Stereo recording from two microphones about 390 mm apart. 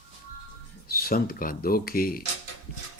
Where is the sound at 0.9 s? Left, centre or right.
Left.